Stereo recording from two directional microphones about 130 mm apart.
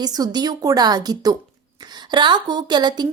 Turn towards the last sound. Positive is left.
turn(degrees=-35)  # may be behind; listen again after turning